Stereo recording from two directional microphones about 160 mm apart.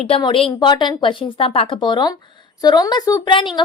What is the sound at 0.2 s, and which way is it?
A woman's voice, 35° left (ahead or behind).